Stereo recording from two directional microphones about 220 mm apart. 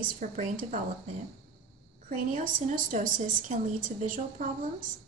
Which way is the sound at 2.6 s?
35° right (ahead or behind).